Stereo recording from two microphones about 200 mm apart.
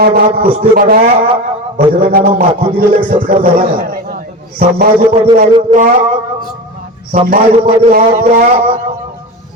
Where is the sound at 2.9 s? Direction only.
45° right (ahead or behind).